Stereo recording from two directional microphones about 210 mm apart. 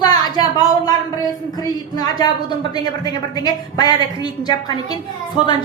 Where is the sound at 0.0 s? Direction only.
20° left (ahead or behind).